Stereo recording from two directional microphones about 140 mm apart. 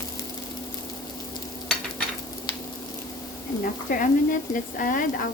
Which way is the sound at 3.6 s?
90° left.